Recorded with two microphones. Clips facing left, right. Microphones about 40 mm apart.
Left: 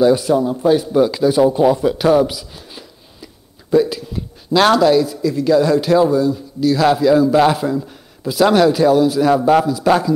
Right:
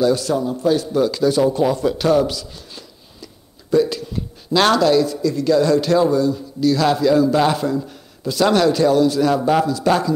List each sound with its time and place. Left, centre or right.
0.0 s speech: centre